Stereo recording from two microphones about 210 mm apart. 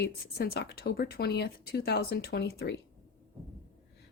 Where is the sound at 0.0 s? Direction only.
50° left (ahead or behind).